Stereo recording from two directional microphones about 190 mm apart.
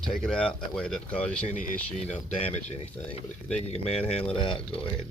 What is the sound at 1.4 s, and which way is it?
Speech, 45° left (ahead or behind).